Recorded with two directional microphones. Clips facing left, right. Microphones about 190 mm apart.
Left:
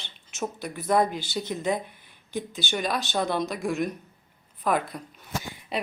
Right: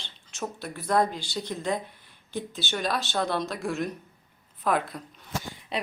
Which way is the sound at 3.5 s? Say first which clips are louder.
Left 2 dB; centre (ahead or behind).